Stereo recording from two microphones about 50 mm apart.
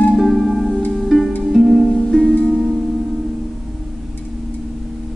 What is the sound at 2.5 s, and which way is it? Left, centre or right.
Music, centre.